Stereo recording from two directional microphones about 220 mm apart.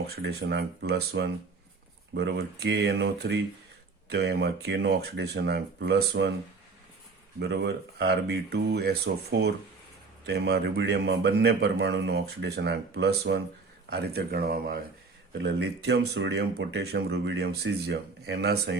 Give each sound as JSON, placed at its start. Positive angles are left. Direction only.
{"t": 0.2, "sound": "speech", "side_deg": -50}
{"t": 7.3, "sound": "speech", "side_deg": -50}